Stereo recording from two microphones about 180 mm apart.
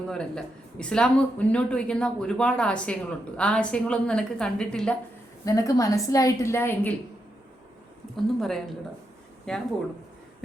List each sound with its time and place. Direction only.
0.1 s speech: 5° left (ahead or behind)
5.5 s a woman's voice: 20° left (ahead or behind)
8.1 s speech: centre (ahead or behind)